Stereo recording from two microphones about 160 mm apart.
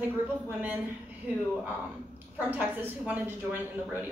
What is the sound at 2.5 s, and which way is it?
A woman's voice, 10° right (ahead or behind).